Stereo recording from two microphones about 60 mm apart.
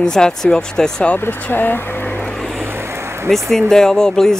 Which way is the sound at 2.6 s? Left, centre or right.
Right.